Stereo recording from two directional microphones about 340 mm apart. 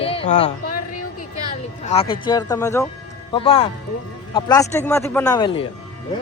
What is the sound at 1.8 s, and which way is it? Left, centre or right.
Speech, centre.